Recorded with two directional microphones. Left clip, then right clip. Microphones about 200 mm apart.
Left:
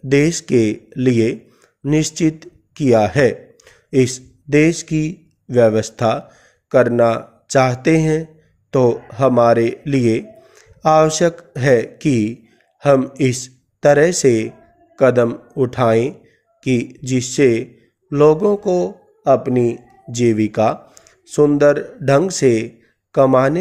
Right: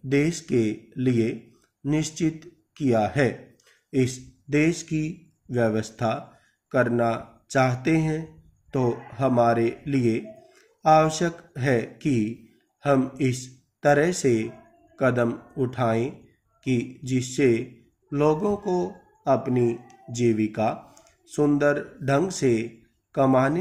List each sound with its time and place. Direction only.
0.1 s a man's voice: 50° left (ahead or behind)